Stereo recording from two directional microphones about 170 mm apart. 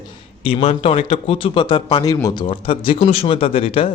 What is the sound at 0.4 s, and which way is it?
A man's voice, 35° left (ahead or behind).